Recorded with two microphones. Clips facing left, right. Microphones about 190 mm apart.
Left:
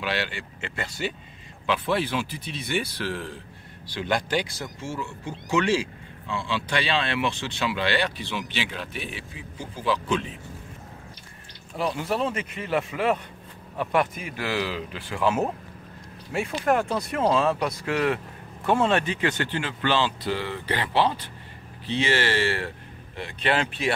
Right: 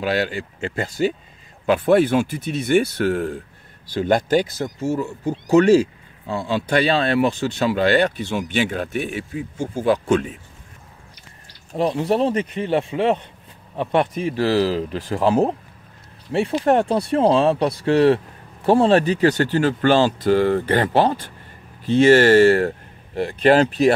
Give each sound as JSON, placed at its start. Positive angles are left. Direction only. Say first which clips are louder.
{"t": 0.0, "sound": "speech", "louder": "right 8 dB", "side_deg": -40}
{"t": 11.7, "sound": "speech", "louder": "right 7 dB", "side_deg": -35}